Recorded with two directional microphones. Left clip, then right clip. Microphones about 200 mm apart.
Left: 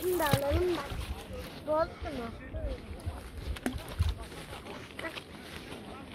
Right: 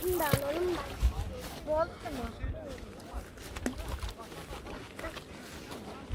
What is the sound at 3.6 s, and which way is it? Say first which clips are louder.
Clip-clop: left 1 dB; 40° left (ahead or behind).